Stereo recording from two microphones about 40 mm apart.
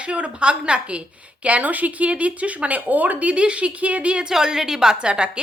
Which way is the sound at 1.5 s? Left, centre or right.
Right.